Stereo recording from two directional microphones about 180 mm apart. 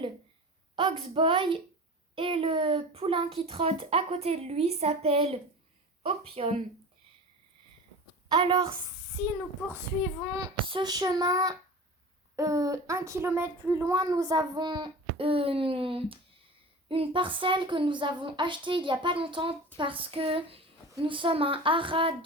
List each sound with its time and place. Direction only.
0.8 s speech: 30° right (ahead or behind)
8.3 s speech: 25° right (ahead or behind)
10.4 s speech: 25° right (ahead or behind)